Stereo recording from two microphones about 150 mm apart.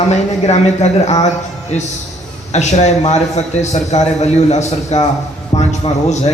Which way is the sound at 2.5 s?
50° left (ahead or behind).